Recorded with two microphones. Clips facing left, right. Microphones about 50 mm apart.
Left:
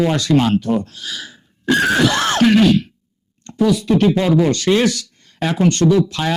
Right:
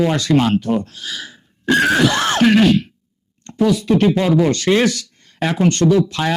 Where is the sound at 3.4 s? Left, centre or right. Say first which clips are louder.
Even; right.